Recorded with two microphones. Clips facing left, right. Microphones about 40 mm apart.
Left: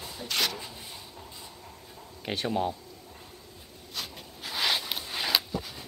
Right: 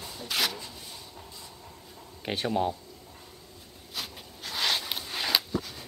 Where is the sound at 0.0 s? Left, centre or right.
Centre.